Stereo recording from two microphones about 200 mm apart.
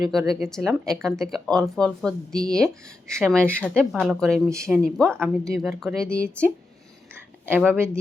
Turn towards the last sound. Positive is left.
turn(degrees=-10)  # may be behind; listen again after turning